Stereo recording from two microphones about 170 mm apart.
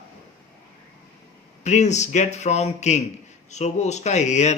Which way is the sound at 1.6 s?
45° left (ahead or behind).